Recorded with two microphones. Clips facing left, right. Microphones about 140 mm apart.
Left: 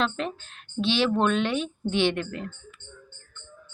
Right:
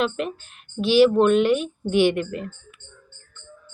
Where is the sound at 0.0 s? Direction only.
10° right (ahead or behind).